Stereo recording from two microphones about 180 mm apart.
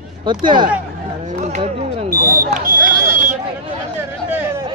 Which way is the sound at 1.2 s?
40° right (ahead or behind).